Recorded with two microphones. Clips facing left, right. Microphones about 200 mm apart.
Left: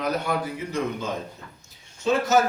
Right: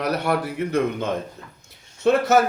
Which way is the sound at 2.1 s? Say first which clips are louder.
Right 4 dB; 60° right (ahead or behind).